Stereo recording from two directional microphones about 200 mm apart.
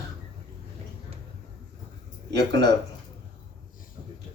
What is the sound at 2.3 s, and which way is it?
Speech, 60° right (ahead or behind).